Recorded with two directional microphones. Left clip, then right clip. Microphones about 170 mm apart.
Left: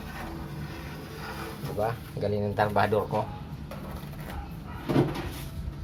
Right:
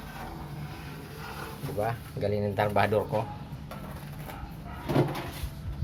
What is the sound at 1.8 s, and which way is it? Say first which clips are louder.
Speech: left 1 dB; 20° right (ahead or behind).